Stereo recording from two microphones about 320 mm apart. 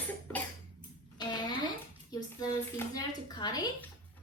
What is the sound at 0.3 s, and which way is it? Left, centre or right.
Cough, centre.